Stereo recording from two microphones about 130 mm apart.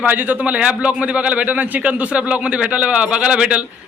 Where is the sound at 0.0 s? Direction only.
15° right (ahead or behind).